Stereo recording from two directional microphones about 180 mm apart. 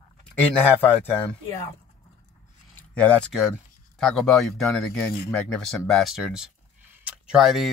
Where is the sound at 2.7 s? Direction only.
5° left (ahead or behind).